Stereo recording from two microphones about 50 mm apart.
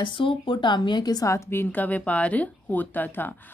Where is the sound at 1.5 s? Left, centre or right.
Left.